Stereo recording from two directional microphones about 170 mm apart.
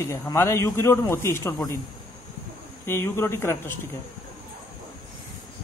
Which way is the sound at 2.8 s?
15° left (ahead or behind).